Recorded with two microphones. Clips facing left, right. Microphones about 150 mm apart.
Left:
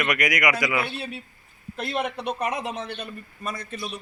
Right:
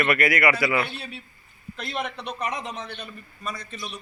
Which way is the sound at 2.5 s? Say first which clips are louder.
Left 3 dB; 5° left (ahead or behind).